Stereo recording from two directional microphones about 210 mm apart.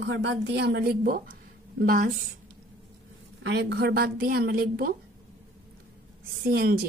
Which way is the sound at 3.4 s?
55° right (ahead or behind).